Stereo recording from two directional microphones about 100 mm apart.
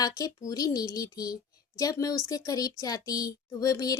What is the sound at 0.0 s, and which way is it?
A woman's voice, 40° left (ahead or behind).